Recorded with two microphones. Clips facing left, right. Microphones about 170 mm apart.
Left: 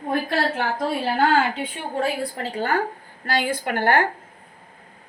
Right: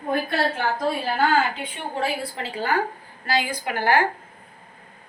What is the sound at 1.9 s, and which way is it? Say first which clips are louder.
A woman's voice: left 2 dB; 45° left (ahead or behind).